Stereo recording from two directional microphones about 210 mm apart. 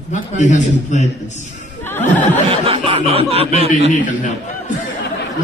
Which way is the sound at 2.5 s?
25° right (ahead or behind).